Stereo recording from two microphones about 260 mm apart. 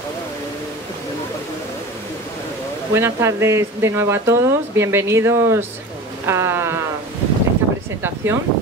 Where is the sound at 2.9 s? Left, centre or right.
Centre.